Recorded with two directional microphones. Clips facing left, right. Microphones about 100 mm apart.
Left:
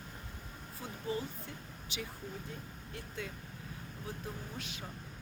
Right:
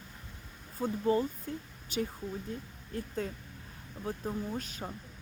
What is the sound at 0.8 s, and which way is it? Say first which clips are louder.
Speech: right 10 dB; 45° right (ahead or behind).